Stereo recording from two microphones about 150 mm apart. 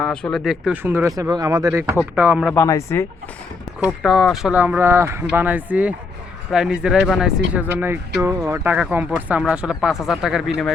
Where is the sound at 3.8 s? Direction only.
Centre (ahead or behind).